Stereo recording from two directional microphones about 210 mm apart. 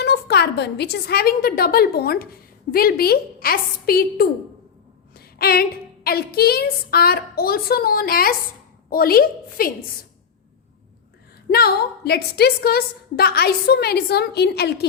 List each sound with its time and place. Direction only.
0.0 s a woman's voice: 50° left (ahead or behind)
11.5 s a woman's voice: 50° left (ahead or behind)